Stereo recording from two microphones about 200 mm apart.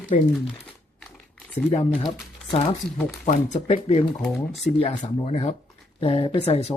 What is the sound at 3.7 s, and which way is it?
Speech, 35° left (ahead or behind).